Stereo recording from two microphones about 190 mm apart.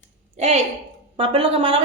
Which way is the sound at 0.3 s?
30° right (ahead or behind).